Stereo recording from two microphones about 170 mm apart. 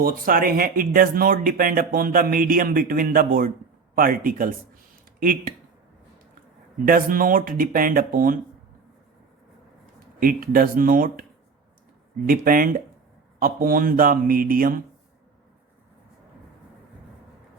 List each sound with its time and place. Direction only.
0.0 s speech: 55° right (ahead or behind)
6.8 s speech: 55° right (ahead or behind)
10.2 s speech: 55° right (ahead or behind)